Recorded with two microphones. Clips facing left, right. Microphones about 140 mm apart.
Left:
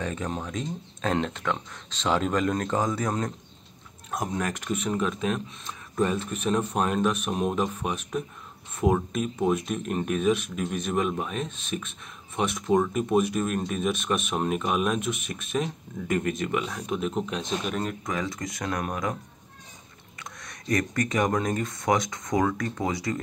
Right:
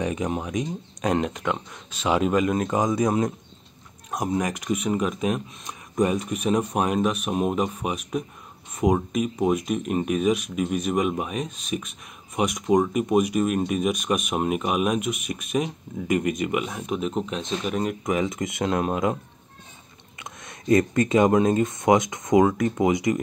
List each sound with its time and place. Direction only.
0.0 s speech: 15° right (ahead or behind)
18.0 s speech: 20° right (ahead or behind)
20.2 s speech: 25° right (ahead or behind)